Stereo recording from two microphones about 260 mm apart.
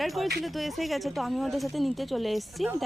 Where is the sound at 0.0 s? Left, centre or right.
Centre.